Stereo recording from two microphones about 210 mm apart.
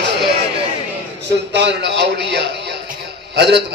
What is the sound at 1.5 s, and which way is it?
A man's voice, 55° right (ahead or behind).